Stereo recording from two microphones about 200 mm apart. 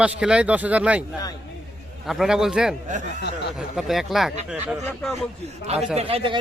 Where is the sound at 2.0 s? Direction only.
Centre (ahead or behind).